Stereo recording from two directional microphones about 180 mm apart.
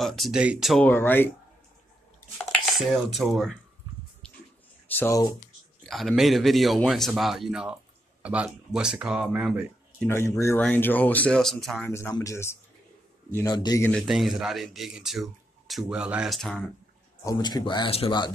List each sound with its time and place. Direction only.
0.0 s speech: centre (ahead or behind)
0.8 s speech: 10° left (ahead or behind)
2.5 s speech: centre (ahead or behind)
4.8 s speech: 10° left (ahead or behind)
5.9 s speech: centre (ahead or behind)
10.0 s speech: 15° left (ahead or behind)
11.9 s speech: 15° left (ahead or behind)
13.8 s speech: centre (ahead or behind)
17.2 s speech: 20° left (ahead or behind)